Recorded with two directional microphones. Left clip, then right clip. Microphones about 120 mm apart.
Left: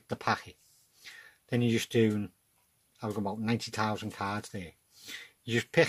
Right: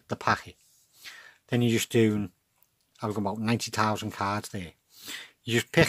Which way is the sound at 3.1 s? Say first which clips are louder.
Right 3 dB; 50° right (ahead or behind).